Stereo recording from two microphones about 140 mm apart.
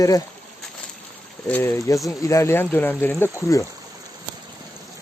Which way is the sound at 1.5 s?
15° left (ahead or behind).